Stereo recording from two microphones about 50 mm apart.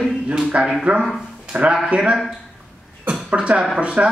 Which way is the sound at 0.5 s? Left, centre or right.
Right.